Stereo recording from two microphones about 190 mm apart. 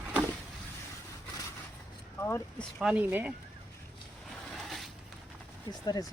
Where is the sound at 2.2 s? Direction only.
15° left (ahead or behind).